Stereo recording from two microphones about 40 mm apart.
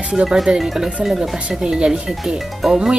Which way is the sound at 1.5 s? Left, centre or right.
Centre.